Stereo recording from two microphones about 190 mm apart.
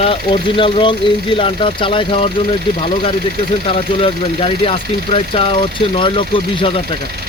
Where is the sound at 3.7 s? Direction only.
30° left (ahead or behind).